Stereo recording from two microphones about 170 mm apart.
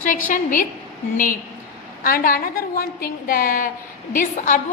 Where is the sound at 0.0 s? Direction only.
50° left (ahead or behind).